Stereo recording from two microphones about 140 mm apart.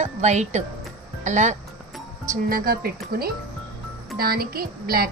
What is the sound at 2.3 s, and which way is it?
Speech, 90° right.